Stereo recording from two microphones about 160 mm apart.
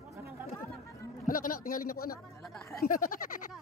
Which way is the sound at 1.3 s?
60° left (ahead or behind).